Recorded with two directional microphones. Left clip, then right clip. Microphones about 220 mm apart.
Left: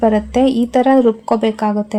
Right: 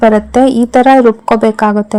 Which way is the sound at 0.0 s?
25° right (ahead or behind).